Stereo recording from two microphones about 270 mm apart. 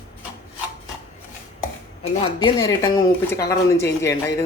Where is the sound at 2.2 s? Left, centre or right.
Centre.